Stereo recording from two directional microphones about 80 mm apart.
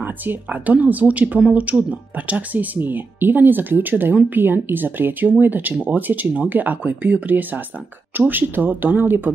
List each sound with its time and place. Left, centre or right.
0.0 s speech: right